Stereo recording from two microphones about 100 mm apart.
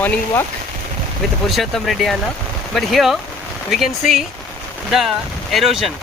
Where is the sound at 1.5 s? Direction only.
Centre (ahead or behind).